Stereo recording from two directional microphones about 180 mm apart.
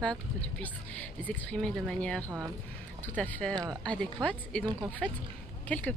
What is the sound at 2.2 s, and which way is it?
Speech, 15° right (ahead or behind).